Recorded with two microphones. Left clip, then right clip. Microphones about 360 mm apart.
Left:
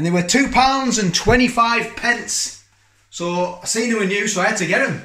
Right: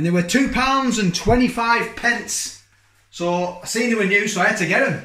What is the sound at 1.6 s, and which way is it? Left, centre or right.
Speech, centre.